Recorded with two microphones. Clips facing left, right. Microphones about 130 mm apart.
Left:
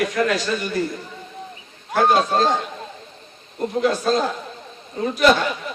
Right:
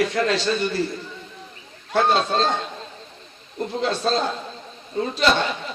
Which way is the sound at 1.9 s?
25° right (ahead or behind).